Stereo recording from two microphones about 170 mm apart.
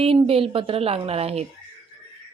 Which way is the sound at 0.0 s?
35° right (ahead or behind).